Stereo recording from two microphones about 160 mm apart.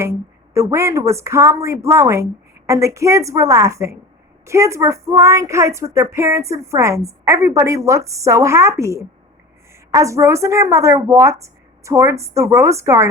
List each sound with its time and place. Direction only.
0.0 s speech: 15° right (ahead or behind)